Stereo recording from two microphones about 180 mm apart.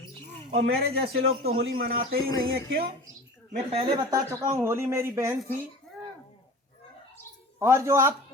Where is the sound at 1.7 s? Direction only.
55° right (ahead or behind).